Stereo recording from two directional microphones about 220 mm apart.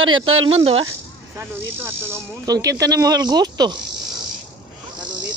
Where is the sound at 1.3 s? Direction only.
10° right (ahead or behind).